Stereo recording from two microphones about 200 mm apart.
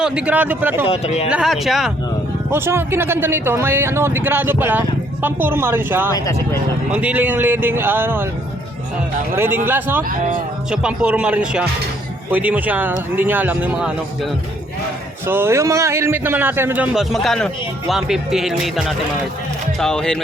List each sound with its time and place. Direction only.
0.0 s speech: 5° right (ahead or behind)
0.9 s speech: 30° left (ahead or behind)
1.3 s speech: 5° right (ahead or behind)
2.5 s speech: 10° right (ahead or behind)
6.1 s speech: 15° left (ahead or behind)
6.9 s speech: 5° right (ahead or behind)
9.3 s speech: 10° right (ahead or behind)
10.0 s speech: 40° right (ahead or behind)
10.7 s speech: 5° right (ahead or behind)
15.3 s speech: 10° right (ahead or behind)